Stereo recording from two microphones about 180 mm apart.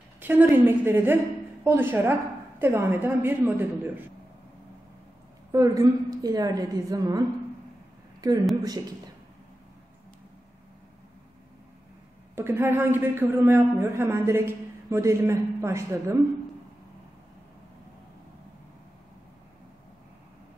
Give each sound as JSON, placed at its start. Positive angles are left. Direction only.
{"t": 0.2, "sound": "a woman's voice", "side_deg": -10}
{"t": 5.5, "sound": "a woman's voice", "side_deg": -20}
{"t": 12.4, "sound": "a man's voice", "side_deg": -10}